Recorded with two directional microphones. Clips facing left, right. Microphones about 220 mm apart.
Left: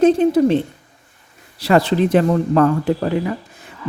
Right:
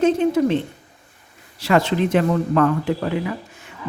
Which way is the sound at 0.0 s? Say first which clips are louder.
Left 4 dB; 35° left (ahead or behind).